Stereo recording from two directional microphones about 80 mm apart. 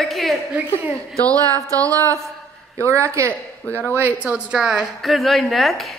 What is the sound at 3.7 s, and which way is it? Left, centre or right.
Speech, left.